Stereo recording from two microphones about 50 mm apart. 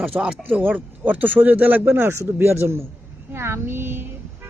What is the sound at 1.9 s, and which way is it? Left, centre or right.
Speech, right.